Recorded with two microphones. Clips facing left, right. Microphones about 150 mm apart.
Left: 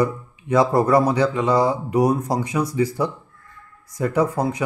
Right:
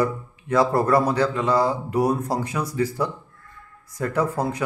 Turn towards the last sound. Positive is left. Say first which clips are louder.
# left 3 dB
turn(degrees=15)  # may be behind; listen again after turning